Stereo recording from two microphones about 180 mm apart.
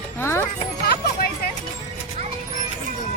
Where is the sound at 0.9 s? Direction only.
60° left (ahead or behind).